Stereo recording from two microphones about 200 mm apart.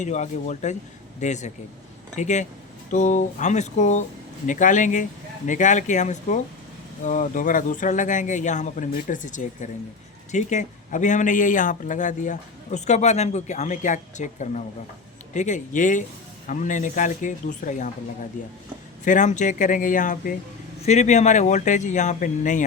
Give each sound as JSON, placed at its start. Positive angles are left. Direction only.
{"t": 0.0, "sound": "speech", "side_deg": 35}
{"t": 19.0, "sound": "speech", "side_deg": 40}